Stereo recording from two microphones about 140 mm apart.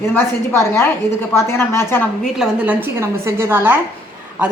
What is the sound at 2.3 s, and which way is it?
A woman's voice, 5° right (ahead or behind).